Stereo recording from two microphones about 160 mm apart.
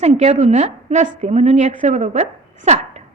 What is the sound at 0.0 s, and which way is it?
A woman's voice, 45° right (ahead or behind).